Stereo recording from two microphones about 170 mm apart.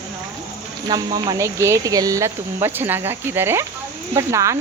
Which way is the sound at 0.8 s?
25° right (ahead or behind).